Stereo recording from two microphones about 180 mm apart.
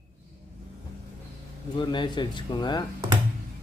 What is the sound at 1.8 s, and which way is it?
Speech, 25° left (ahead or behind).